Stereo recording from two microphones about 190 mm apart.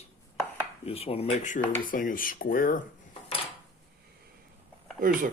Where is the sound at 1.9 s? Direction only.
45° left (ahead or behind).